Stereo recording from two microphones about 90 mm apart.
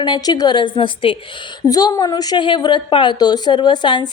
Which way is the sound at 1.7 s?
50° left (ahead or behind).